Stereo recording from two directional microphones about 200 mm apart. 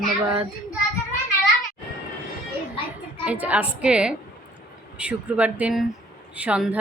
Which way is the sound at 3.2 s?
5° right (ahead or behind).